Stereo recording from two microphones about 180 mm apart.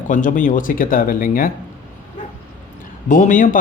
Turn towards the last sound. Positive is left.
turn(degrees=45)  # may be behind; listen again after turning